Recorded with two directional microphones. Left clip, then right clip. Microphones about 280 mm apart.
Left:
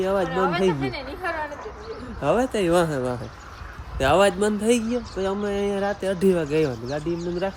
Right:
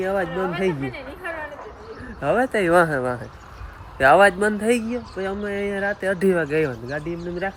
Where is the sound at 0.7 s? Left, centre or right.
Left.